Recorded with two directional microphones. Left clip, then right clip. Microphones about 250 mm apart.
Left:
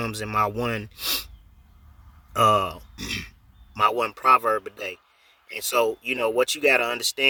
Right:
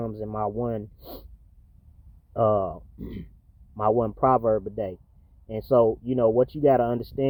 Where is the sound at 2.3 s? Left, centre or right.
Left.